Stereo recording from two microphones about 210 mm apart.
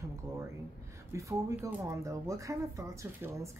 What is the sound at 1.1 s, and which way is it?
Speech, 15° right (ahead or behind).